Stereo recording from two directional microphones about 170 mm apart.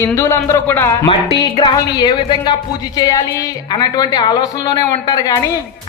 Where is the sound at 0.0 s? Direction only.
15° left (ahead or behind).